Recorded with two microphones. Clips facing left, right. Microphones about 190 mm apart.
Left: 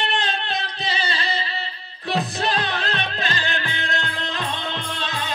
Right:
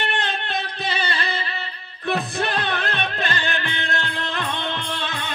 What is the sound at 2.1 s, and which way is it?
Music, 60° right (ahead or behind).